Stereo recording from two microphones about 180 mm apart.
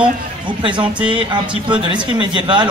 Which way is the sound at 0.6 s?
25° right (ahead or behind).